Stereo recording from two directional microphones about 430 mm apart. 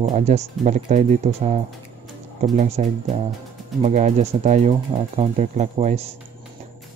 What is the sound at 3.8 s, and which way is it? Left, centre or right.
Speech, centre.